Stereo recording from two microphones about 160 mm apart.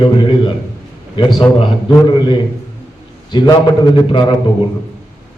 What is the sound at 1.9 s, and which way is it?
Speech, 30° left (ahead or behind).